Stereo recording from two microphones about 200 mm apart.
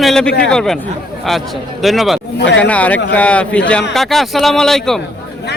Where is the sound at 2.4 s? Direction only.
60° left (ahead or behind).